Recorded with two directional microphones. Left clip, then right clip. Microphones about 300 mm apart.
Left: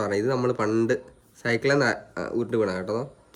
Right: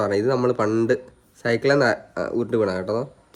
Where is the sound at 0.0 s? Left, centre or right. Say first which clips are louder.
Right 4 dB; centre.